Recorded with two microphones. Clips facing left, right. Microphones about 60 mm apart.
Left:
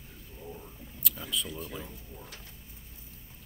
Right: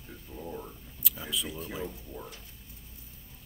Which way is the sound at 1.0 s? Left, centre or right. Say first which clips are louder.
Even; centre.